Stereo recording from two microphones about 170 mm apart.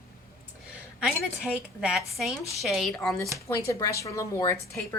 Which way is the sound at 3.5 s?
20° left (ahead or behind).